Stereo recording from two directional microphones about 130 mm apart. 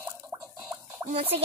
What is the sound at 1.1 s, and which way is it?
Speech, 45° right (ahead or behind).